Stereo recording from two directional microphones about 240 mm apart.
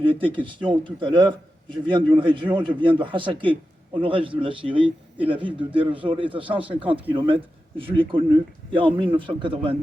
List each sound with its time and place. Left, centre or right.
0.0 s a man's voice: right